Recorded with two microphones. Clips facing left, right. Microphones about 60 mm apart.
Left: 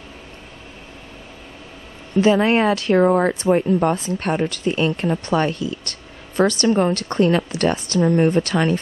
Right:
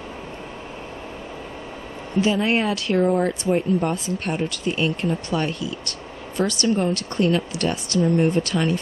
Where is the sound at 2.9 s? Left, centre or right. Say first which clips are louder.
Left 3 dB; left.